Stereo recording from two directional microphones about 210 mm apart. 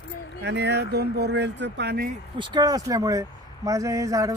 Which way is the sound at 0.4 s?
55° right (ahead or behind).